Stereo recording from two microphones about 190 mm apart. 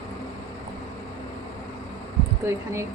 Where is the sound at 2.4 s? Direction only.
15° right (ahead or behind).